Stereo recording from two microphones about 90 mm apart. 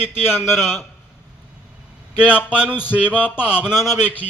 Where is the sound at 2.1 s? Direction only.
10° right (ahead or behind).